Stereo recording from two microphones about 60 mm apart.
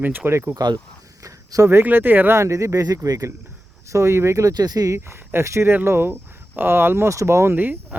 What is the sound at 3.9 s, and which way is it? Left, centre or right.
Speech, right.